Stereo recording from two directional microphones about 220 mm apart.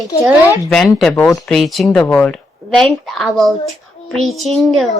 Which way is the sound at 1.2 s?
15° left (ahead or behind).